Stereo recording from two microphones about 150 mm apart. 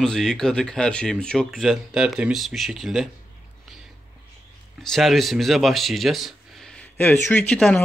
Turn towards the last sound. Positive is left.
turn(degrees=10)  # may be behind; listen again after turning